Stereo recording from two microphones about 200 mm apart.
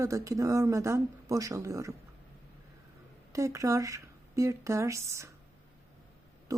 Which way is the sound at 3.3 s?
15° right (ahead or behind).